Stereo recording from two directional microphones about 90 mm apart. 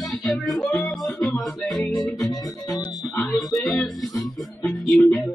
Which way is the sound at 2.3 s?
40° left (ahead or behind).